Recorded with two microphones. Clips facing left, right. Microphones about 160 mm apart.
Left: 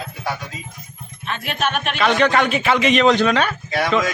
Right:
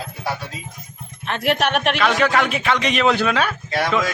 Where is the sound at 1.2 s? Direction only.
75° right (ahead or behind).